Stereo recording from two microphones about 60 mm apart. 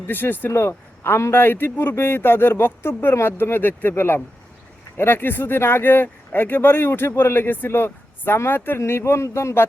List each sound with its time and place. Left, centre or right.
0.1 s speech: left
0.5 s speech: left
8.8 s a man's voice: left